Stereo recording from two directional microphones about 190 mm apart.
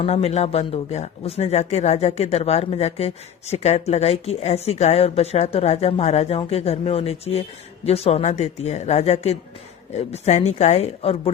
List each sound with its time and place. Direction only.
0.0 s speech: 35° left (ahead or behind)